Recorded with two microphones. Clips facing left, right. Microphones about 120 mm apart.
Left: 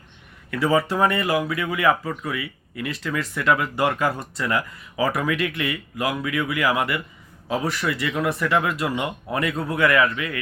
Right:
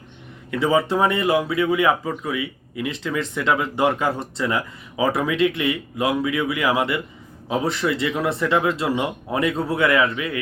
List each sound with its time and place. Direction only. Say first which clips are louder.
0.5 s speech: right 2 dB; 20° right (ahead or behind)